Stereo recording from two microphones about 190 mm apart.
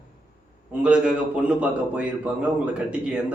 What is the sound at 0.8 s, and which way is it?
A man's voice, 5° right (ahead or behind).